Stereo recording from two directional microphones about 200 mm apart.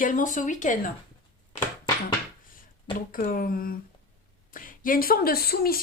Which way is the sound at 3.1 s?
45° left (ahead or behind).